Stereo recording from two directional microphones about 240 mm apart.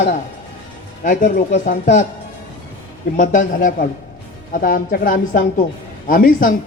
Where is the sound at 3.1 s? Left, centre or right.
Left.